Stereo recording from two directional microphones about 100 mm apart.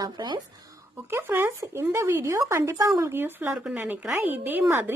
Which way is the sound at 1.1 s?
25° right (ahead or behind).